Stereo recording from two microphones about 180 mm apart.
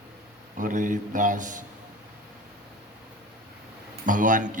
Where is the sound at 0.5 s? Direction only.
45° right (ahead or behind).